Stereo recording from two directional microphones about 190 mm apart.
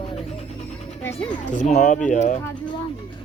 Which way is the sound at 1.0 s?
10° left (ahead or behind).